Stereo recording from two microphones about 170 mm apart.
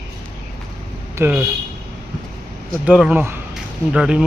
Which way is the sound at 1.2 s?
10° right (ahead or behind).